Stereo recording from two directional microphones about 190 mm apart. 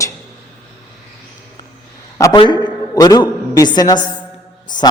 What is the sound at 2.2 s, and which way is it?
A man's voice, 20° left (ahead or behind).